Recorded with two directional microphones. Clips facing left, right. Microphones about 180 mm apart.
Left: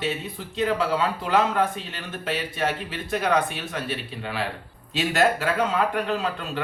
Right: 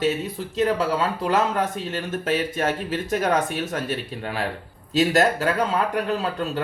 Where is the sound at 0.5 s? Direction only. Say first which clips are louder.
Right 2 dB; 40° right (ahead or behind).